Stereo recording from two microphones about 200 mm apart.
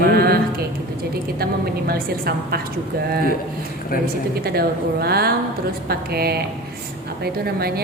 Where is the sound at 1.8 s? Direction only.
50° right (ahead or behind).